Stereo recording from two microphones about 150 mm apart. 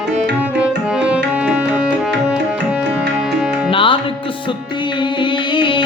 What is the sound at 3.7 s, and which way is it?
Music, 35° left (ahead or behind).